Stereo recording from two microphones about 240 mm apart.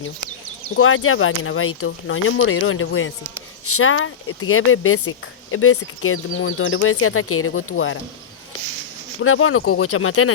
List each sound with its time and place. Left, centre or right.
0.6 s speech: left
9.2 s speech: left